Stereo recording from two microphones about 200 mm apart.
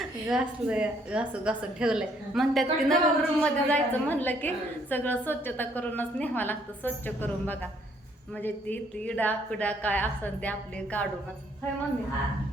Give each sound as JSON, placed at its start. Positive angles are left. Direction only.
{"t": 0.0, "sound": "a woman's voice", "side_deg": -5}